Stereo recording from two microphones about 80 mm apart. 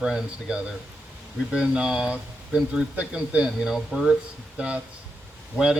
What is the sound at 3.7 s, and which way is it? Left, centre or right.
Speech, centre.